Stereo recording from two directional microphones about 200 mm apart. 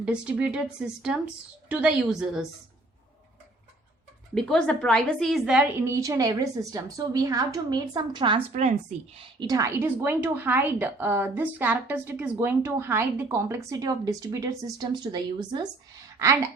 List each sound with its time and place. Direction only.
0.0 s a woman's voice: 5° right (ahead or behind)
4.4 s a woman's voice: 5° left (ahead or behind)
5.9 s a woman's voice: 15° right (ahead or behind)